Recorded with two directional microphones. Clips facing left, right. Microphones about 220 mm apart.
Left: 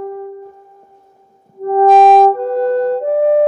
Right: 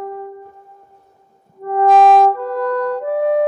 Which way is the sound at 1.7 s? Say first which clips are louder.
Left 3 dB; 45° left (ahead or behind).